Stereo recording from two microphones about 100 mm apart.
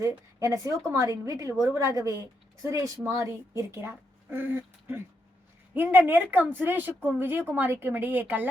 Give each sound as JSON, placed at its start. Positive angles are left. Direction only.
{"t": 0.0, "sound": "a woman's voice", "side_deg": -30}